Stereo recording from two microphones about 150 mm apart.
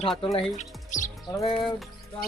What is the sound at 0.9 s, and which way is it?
Music, 55° left (ahead or behind).